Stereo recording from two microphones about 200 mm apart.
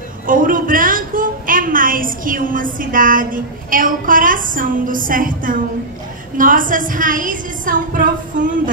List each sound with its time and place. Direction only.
0.3 s a woman's voice: 45° right (ahead or behind)